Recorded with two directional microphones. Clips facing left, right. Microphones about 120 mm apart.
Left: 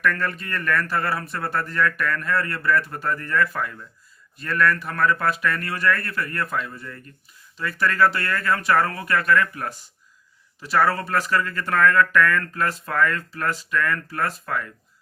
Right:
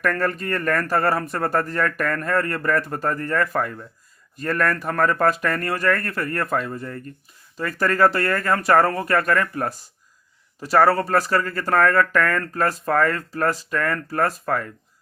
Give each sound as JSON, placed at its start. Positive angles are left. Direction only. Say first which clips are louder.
{"t": 0.0, "sound": "speech", "louder": "right 2 dB", "side_deg": -40}